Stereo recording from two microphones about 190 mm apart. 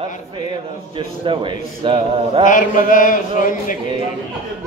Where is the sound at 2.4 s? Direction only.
45° left (ahead or behind).